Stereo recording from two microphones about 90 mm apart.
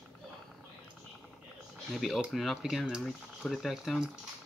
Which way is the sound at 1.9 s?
Centre (ahead or behind).